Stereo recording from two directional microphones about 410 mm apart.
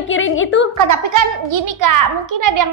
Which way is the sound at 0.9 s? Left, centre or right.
Right.